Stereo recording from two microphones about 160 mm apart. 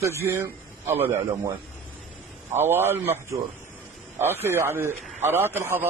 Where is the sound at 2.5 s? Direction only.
15° right (ahead or behind).